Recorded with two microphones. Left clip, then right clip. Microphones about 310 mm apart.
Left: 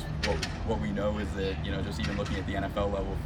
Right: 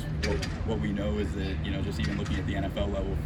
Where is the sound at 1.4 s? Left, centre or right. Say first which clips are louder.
Left 1 dB; left.